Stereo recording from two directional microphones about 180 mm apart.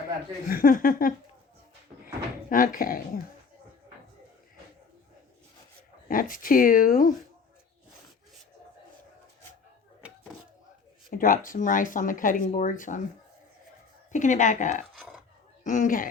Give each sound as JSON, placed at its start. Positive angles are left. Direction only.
{"t": 0.4, "sound": "speech", "side_deg": 50}
{"t": 2.5, "sound": "speech", "side_deg": 50}
{"t": 6.1, "sound": "speech", "side_deg": 50}
{"t": 11.1, "sound": "speech", "side_deg": 50}
{"t": 14.1, "sound": "speech", "side_deg": 45}
{"t": 14.9, "sound": "a sound", "side_deg": 0}
{"t": 15.6, "sound": "speech", "side_deg": 45}